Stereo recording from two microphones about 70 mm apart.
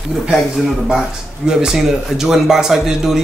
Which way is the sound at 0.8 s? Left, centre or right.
Centre.